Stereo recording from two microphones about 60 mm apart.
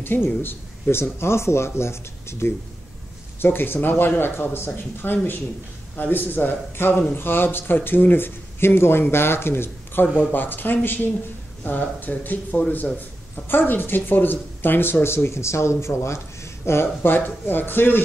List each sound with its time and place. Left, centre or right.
0.0 s a man's voice: left
3.9 s speech: left
4.2 s a man's voice: left
13.5 s a man's voice: left